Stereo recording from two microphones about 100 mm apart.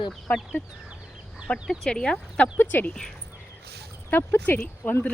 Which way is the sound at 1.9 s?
5° left (ahead or behind).